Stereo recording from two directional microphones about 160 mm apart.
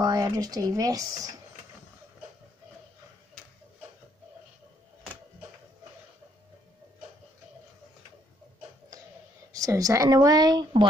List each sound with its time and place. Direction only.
0.0 s speech: 25° right (ahead or behind)
9.6 s speech: 20° right (ahead or behind)